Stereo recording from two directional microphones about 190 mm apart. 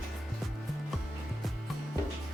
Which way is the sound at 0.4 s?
Centre (ahead or behind).